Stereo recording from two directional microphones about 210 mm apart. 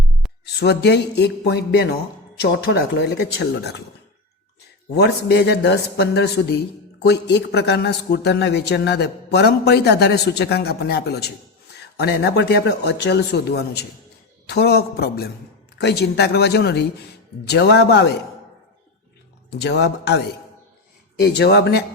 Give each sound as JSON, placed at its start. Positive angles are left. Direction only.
{"t": 0.4, "sound": "a man's voice", "side_deg": 50}
{"t": 4.9, "sound": "a man's voice", "side_deg": 55}
{"t": 19.5, "sound": "a man's voice", "side_deg": 50}
{"t": 21.2, "sound": "a man's voice", "side_deg": 50}